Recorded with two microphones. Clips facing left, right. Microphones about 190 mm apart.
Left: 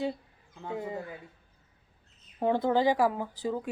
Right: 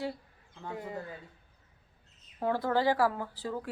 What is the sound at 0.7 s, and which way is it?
Speech, 25° left (ahead or behind).